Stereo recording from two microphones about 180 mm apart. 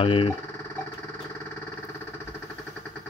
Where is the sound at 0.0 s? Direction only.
30° left (ahead or behind).